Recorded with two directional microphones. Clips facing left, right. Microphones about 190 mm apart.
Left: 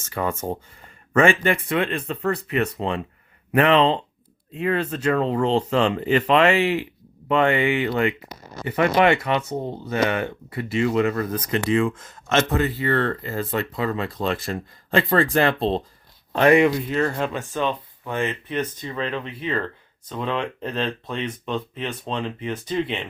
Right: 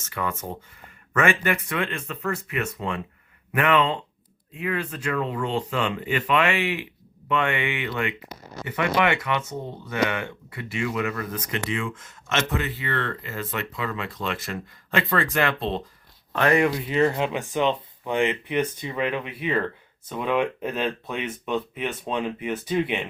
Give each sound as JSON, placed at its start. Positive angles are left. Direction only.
{"t": 0.0, "sound": "speech", "side_deg": 30}
{"t": 9.0, "sound": "speech", "side_deg": 25}
{"t": 16.6, "sound": "speech", "side_deg": 5}
{"t": 16.9, "sound": "speech", "side_deg": -15}